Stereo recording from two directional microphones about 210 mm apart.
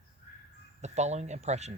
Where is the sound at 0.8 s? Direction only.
35° right (ahead or behind).